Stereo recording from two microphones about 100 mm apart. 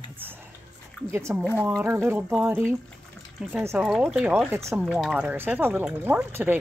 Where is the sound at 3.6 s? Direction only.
25° right (ahead or behind).